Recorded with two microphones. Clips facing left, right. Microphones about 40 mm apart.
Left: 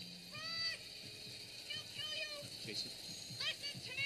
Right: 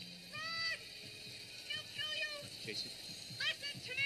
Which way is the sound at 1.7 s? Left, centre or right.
Centre.